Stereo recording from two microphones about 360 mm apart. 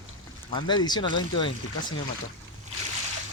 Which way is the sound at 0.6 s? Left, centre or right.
Centre.